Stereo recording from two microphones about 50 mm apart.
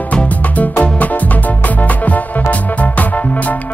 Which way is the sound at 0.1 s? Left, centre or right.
Left.